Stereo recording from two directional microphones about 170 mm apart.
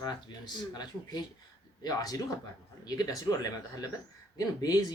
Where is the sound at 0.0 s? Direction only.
25° left (ahead or behind).